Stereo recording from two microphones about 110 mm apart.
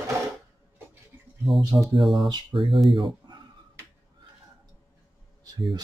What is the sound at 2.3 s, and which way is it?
Speech, 50° right (ahead or behind).